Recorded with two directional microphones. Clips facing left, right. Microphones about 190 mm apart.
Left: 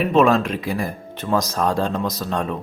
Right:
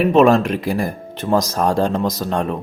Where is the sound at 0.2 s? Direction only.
40° right (ahead or behind).